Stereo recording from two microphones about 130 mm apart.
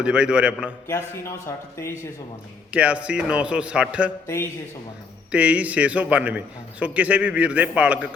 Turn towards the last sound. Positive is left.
turn(degrees=-10)  # may be behind; listen again after turning